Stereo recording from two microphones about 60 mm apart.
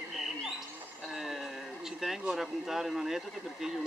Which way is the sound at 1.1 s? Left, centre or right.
Centre.